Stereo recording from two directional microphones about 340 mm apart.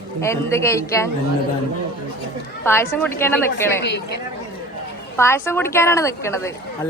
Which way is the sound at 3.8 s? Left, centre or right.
Left.